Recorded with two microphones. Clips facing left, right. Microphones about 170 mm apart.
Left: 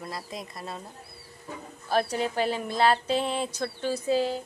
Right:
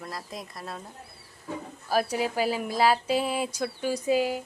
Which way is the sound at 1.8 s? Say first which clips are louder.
Even; 5° right (ahead or behind).